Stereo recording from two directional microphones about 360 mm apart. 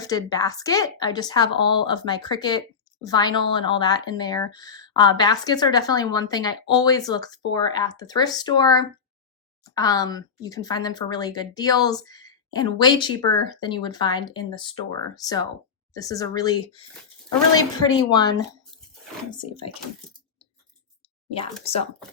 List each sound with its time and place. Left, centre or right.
0.0 s a woman's voice: centre
21.7 s a woman's voice: centre